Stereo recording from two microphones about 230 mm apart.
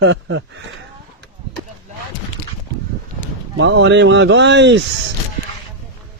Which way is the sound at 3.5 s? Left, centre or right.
Right.